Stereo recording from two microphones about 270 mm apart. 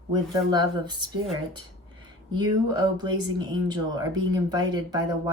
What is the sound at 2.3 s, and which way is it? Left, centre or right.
Speech, centre.